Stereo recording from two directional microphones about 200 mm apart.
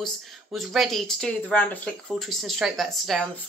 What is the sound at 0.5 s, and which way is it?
Speech, centre (ahead or behind).